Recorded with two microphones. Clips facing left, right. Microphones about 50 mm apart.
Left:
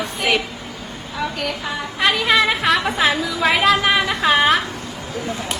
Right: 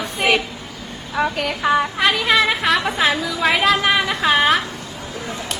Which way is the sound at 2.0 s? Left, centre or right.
Centre.